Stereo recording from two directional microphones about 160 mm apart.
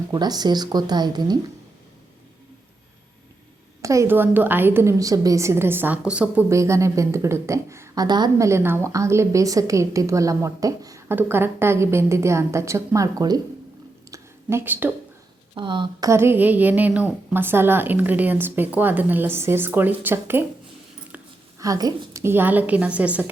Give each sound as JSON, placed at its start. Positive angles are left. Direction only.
{"t": 0.1, "sound": "a woman's voice", "side_deg": -25}
{"t": 3.8, "sound": "a woman's voice", "side_deg": -20}
{"t": 6.5, "sound": "a woman's voice", "side_deg": -20}
{"t": 14.1, "sound": "a sound", "side_deg": -15}
{"t": 15.5, "sound": "a woman's voice", "side_deg": -30}
{"t": 16.0, "sound": "a woman's voice", "side_deg": -15}
{"t": 21.6, "sound": "a woman's voice", "side_deg": -20}